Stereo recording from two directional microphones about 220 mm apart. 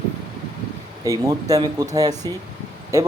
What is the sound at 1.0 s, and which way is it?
Speech, 15° right (ahead or behind).